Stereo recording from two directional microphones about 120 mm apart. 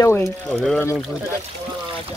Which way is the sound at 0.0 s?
20° left (ahead or behind).